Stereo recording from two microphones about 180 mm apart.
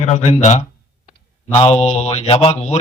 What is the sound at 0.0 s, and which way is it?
Speech, 40° left (ahead or behind).